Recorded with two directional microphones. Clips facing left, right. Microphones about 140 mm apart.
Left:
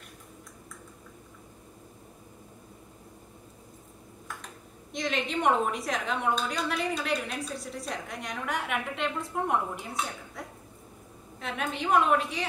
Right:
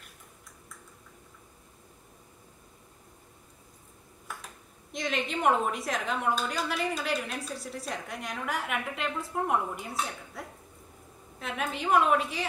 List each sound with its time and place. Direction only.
4.9 s a woman's voice: centre (ahead or behind)